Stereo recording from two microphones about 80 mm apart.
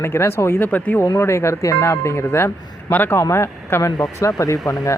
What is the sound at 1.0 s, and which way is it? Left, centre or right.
Speech, left.